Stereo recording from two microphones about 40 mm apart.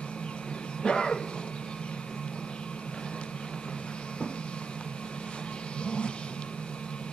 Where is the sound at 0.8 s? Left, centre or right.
Left.